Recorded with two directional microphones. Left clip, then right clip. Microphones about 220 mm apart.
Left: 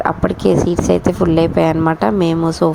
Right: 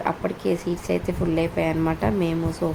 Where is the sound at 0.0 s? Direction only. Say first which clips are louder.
Left 9 dB; 30° left (ahead or behind).